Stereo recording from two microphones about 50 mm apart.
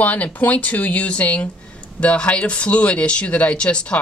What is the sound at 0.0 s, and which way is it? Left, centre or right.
Speech, left.